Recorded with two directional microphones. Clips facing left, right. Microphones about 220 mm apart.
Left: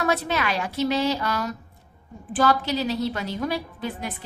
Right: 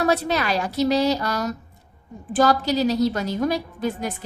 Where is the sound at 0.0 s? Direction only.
35° right (ahead or behind).